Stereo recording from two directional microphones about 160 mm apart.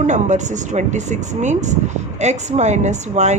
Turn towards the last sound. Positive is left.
turn(degrees=-45)  # may be behind; listen again after turning